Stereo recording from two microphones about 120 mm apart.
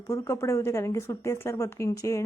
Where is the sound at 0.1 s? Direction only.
25° left (ahead or behind).